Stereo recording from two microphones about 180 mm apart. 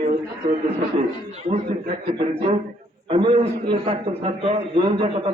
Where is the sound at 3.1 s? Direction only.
25° right (ahead or behind).